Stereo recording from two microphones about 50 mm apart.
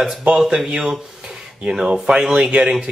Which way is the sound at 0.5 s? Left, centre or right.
Centre.